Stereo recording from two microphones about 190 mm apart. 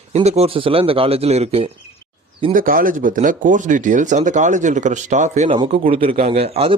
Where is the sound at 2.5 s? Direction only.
45° right (ahead or behind).